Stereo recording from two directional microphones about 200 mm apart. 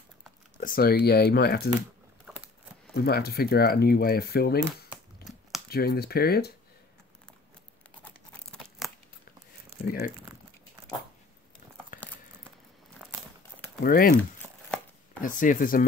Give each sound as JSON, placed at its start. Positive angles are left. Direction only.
{"t": 0.6, "sound": "speech", "side_deg": 45}
{"t": 2.9, "sound": "speech", "side_deg": 50}
{"t": 5.2, "sound": "crumpling", "side_deg": 0}
{"t": 5.7, "sound": "speech", "side_deg": 50}
{"t": 8.0, "sound": "tearing", "side_deg": 5}
{"t": 9.8, "sound": "speech", "side_deg": 45}
{"t": 13.0, "sound": "a sound", "side_deg": -10}
{"t": 13.8, "sound": "speech", "side_deg": 45}
{"t": 15.2, "sound": "speech", "side_deg": 40}